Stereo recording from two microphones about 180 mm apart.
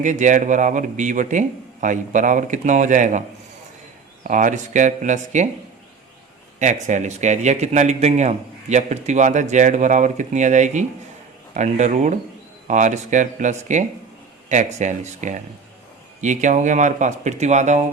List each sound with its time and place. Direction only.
0.0 s a man's voice: 45° right (ahead or behind)
6.8 s a man's voice: 40° right (ahead or behind)